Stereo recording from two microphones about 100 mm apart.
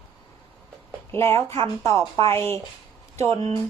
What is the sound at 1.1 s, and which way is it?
Speech, 25° left (ahead or behind).